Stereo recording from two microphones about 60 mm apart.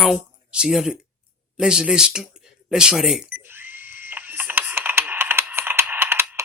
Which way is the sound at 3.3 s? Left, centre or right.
Right.